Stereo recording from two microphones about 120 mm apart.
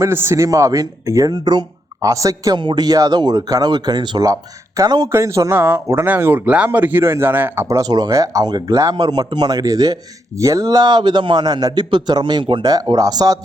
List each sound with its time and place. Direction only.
0.0 s speech: 20° right (ahead or behind)